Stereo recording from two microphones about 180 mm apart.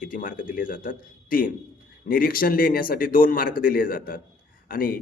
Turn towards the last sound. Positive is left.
turn(degrees=50)  # may be behind; listen again after turning